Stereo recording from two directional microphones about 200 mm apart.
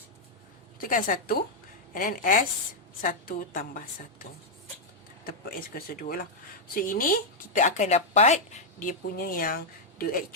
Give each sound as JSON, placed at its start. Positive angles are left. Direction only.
{"t": 0.8, "sound": "speech", "side_deg": 40}